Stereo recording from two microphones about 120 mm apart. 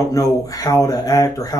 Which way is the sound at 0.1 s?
30° left (ahead or behind).